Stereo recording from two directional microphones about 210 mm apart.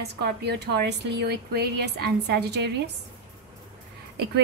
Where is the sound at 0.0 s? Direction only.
50° right (ahead or behind).